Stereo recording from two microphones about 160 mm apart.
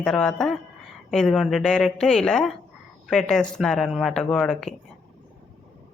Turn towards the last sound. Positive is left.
turn(degrees=5)  # may be behind; listen again after turning